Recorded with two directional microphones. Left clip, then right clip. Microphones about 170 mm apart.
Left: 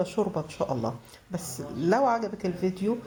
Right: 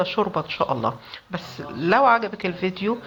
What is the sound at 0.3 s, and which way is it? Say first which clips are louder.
Speech: right 7 dB; 15° right (ahead or behind).